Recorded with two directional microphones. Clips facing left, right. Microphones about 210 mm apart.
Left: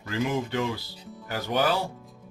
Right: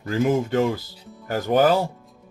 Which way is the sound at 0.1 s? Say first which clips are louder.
Right 7 dB; 45° right (ahead or behind).